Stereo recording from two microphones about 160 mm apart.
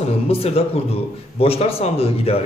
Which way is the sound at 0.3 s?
40° left (ahead or behind).